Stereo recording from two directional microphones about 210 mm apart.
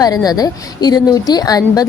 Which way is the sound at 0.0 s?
20° left (ahead or behind).